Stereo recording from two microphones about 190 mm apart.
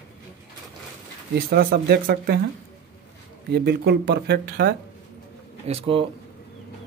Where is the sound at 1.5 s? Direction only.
55° right (ahead or behind).